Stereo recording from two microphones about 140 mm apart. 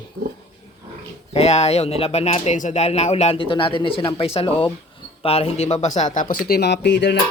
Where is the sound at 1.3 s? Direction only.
50° left (ahead or behind); by 6.6 s 90° left.